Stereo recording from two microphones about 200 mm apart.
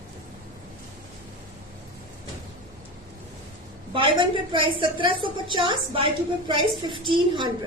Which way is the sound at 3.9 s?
25° right (ahead or behind).